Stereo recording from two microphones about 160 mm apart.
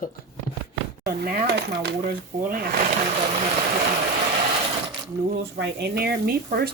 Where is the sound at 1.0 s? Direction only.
70° right (ahead or behind); by 1.9 s 90° right.